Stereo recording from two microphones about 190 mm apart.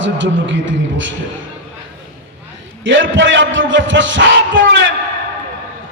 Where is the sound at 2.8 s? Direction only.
75° right (ahead or behind).